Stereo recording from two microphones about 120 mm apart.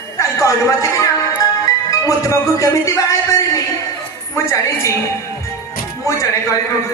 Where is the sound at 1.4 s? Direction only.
30° left (ahead or behind).